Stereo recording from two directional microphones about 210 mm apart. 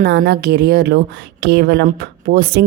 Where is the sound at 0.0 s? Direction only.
45° right (ahead or behind).